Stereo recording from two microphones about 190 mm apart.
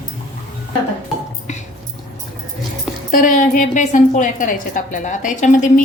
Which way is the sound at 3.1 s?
45° left (ahead or behind).